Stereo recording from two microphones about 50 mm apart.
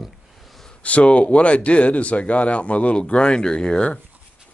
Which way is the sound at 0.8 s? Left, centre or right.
Left.